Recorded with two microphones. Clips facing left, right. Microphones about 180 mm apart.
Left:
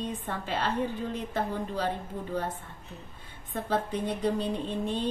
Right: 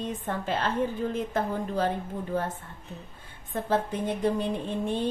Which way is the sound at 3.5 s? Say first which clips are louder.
Right 2 dB; 45° right (ahead or behind).